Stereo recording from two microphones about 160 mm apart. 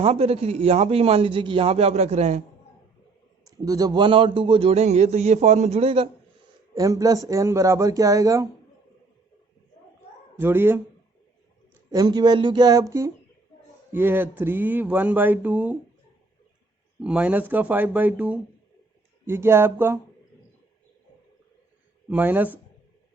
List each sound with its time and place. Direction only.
0.0 s speech: 40° right (ahead or behind)
3.4 s speech: 20° right (ahead or behind)
6.7 s speech: 20° right (ahead or behind)
10.3 s speech: 15° right (ahead or behind)
11.9 s speech: 25° right (ahead or behind)
17.0 s speech: 10° right (ahead or behind)
22.1 s speech: 10° right (ahead or behind)